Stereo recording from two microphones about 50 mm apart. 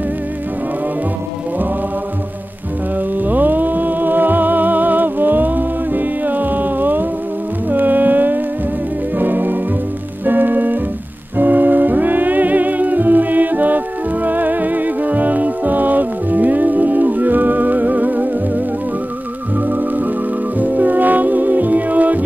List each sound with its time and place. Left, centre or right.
3.2 s music: right